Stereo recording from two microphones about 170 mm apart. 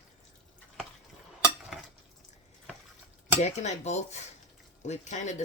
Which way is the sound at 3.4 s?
40° left (ahead or behind).